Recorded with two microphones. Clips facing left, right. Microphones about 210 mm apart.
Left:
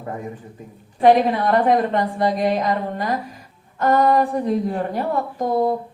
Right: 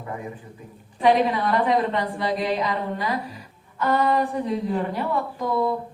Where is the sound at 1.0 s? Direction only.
50° left (ahead or behind).